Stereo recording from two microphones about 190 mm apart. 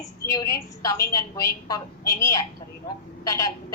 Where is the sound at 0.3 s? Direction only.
20° left (ahead or behind).